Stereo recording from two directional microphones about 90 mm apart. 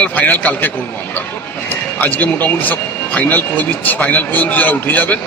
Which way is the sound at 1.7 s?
20° left (ahead or behind).